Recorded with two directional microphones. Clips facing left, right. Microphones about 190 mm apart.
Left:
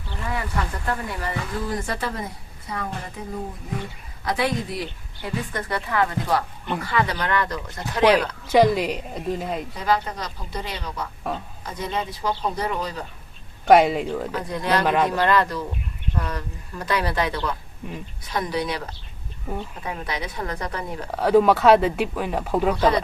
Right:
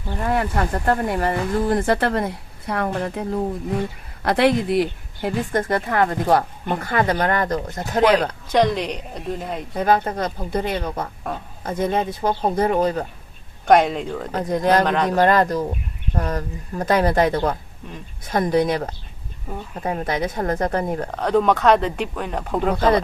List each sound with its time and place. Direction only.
0.1 s speech: 55° right (ahead or behind)
8.5 s speech: 5° left (ahead or behind)
9.7 s speech: 50° right (ahead or behind)
13.7 s speech: 5° left (ahead or behind)
14.3 s speech: 45° right (ahead or behind)
14.8 s speech: 5° left (ahead or behind)
15.1 s speech: 45° right (ahead or behind)
17.8 s a woman's voice: 10° left (ahead or behind)
18.3 s speech: 50° right (ahead or behind)
21.2 s speech: 5° left (ahead or behind)